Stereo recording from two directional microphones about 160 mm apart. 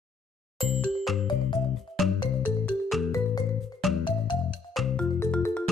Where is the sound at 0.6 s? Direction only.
5° left (ahead or behind).